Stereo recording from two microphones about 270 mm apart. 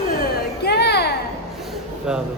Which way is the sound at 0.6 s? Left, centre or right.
Left.